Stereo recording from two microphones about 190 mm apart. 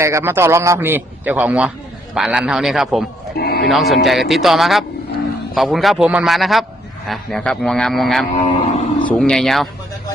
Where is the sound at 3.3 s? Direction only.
55° left (ahead or behind).